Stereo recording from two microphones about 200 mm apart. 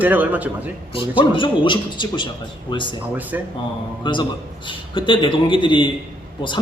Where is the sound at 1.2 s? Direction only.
25° left (ahead or behind).